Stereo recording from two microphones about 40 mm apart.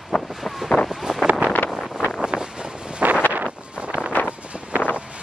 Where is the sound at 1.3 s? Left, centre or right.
Right.